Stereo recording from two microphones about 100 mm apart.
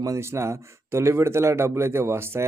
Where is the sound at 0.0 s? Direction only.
30° right (ahead or behind).